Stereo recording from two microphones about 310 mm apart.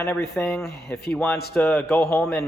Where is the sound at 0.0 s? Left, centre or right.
Centre.